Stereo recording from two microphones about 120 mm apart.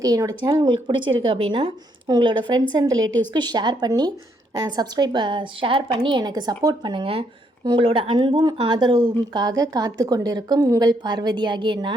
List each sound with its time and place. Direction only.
0.0 s a woman's voice: 30° right (ahead or behind)